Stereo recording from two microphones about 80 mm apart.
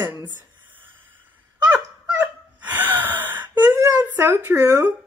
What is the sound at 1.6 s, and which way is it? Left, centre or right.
Gasp, centre.